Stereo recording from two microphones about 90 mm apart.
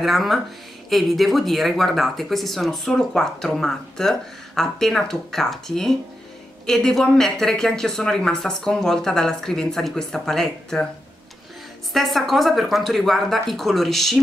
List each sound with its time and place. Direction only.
0.0 s speech: centre (ahead or behind)
11.9 s speech: centre (ahead or behind)